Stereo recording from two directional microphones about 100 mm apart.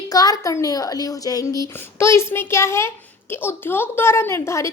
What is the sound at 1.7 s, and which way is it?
A woman's voice, 25° left (ahead or behind).